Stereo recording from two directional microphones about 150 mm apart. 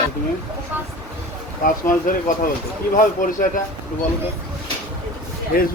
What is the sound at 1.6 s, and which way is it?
A man's voice, 60° left (ahead or behind).